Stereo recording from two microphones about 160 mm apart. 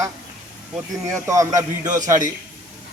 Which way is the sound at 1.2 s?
20° right (ahead or behind).